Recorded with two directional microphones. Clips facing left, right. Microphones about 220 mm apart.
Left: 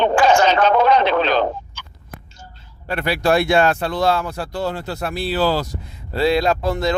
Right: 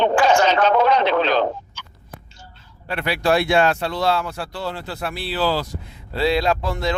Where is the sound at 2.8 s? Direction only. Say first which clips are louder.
Left 2 dB; 40° left (ahead or behind).